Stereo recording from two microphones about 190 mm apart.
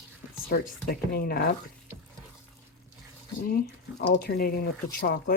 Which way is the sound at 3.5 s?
50° left (ahead or behind).